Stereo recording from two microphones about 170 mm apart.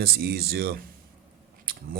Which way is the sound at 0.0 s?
65° right (ahead or behind).